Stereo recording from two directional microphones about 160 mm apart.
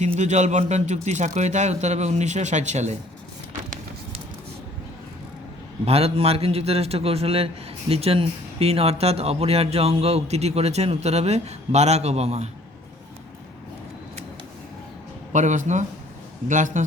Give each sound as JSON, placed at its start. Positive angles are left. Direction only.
{"t": 0.0, "sound": "speech", "side_deg": -45}
{"t": 5.8, "sound": "a man's voice", "side_deg": -40}
{"t": 15.3, "sound": "speech", "side_deg": -50}